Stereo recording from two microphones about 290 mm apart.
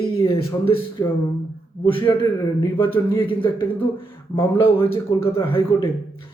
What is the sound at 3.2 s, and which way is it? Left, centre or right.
Speech, centre.